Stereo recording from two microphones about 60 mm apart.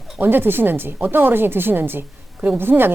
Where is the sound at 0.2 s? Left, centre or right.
Right.